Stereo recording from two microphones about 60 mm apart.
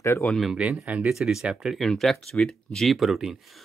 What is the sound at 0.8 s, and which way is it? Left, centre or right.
Speech, centre.